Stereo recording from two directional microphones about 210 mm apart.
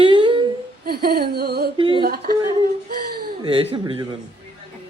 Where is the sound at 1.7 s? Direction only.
25° right (ahead or behind).